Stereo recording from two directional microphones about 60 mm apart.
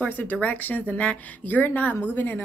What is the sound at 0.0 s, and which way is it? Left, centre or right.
A woman's voice, left.